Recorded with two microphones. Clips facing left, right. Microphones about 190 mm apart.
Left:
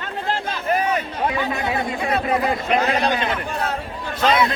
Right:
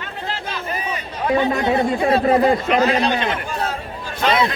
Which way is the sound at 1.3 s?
35° right (ahead or behind).